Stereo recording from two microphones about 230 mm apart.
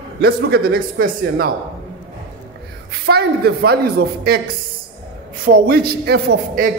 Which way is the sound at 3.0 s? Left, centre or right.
Right.